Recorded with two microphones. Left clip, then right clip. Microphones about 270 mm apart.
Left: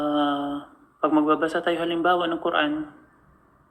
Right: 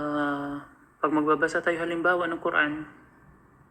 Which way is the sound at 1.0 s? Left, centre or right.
Left.